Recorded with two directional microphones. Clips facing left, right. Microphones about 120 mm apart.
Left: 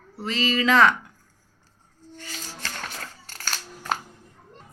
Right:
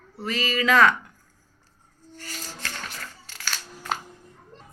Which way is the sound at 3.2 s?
45° left (ahead or behind).